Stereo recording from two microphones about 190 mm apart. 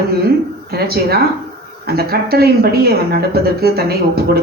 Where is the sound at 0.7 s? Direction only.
55° right (ahead or behind).